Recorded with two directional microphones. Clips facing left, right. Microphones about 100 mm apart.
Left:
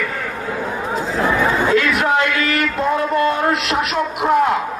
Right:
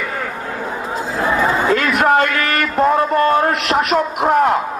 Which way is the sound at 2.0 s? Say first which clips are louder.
Right 3 dB; 45° right (ahead or behind).